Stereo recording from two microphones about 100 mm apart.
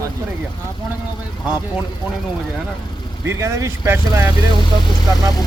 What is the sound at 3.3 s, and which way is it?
A man's voice, 30° right (ahead or behind).